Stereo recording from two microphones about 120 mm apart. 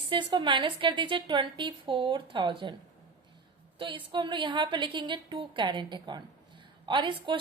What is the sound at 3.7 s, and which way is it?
A woman's voice, 45° right (ahead or behind).